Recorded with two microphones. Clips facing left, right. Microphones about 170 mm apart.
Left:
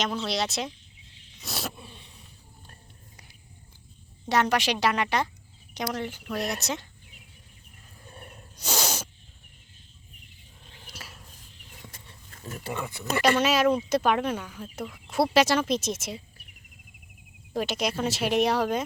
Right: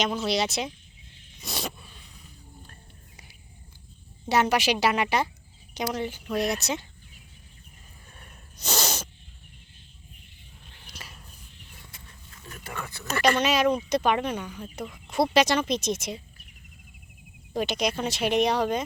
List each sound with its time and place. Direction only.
0.0 s speech: centre (ahead or behind)
1.4 s a sound: centre (ahead or behind)
1.8 s a sound: 30° left (ahead or behind)
4.3 s speech: 5° right (ahead or behind)
8.5 s sneeze: 10° left (ahead or behind)
10.8 s a sound: 5° left (ahead or behind)
12.5 s speech: 25° left (ahead or behind)
13.2 s speech: 5° left (ahead or behind)
17.5 s speech: 5° left (ahead or behind)